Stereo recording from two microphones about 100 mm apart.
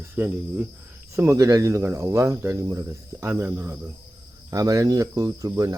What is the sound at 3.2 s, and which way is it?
Speech, 25° right (ahead or behind).